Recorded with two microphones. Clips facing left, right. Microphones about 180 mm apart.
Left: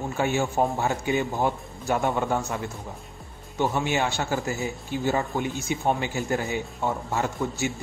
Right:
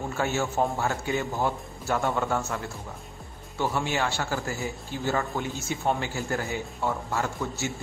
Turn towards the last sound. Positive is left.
turn(degrees=20)  # may be behind; listen again after turning